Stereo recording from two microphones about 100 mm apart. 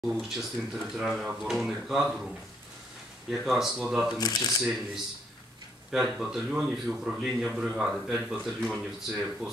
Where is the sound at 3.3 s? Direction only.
5° right (ahead or behind).